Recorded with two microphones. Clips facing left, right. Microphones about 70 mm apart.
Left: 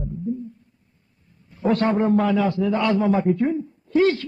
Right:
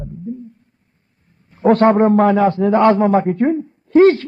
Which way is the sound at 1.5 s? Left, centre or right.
Right.